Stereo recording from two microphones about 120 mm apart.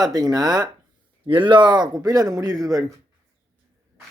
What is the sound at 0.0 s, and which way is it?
Speech, 35° right (ahead or behind).